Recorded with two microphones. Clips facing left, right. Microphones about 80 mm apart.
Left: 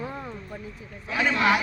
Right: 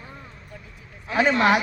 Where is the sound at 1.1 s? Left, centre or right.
Right.